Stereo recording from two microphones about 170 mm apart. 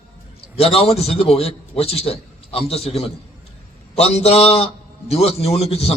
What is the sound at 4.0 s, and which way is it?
A man's voice, 40° left (ahead or behind).